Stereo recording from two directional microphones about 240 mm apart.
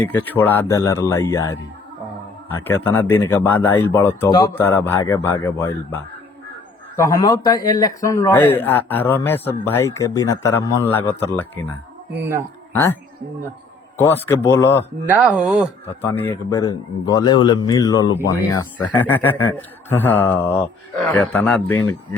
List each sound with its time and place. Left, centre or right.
0.0 s a man's voice: centre
2.6 s a man's voice: centre
12.1 s speech: centre
14.0 s a man's voice: centre
15.0 s speech: centre
16.0 s a man's voice: centre